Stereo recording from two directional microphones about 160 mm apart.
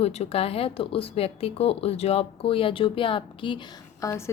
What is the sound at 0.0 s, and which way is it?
Speech, 40° left (ahead or behind).